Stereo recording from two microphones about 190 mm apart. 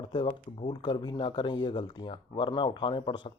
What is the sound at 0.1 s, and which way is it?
Speech, 25° left (ahead or behind).